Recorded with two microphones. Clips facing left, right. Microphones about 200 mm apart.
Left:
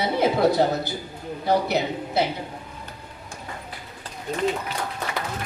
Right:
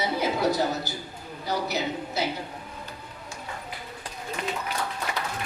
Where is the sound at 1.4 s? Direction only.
60° left (ahead or behind).